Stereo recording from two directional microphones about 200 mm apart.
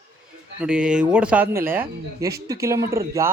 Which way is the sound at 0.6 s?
5° right (ahead or behind).